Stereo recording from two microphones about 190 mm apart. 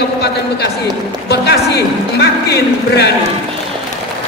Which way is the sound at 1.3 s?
60° left (ahead or behind).